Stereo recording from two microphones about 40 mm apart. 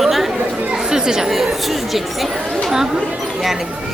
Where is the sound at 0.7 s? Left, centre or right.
Centre.